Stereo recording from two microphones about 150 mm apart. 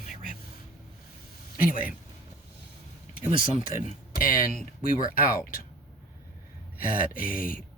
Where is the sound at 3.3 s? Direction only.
60° left (ahead or behind).